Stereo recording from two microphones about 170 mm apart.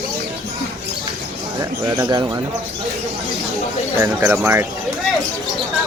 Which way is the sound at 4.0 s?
15° right (ahead or behind).